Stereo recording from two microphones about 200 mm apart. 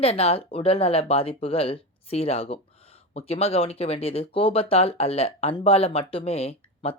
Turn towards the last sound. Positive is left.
turn(degrees=30)  # may be behind; listen again after turning